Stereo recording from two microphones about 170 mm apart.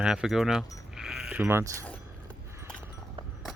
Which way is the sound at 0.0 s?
5° right (ahead or behind).